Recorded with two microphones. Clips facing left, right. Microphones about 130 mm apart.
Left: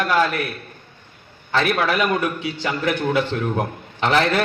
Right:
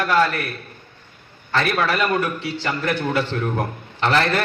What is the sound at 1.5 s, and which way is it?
Speech, 15° left (ahead or behind).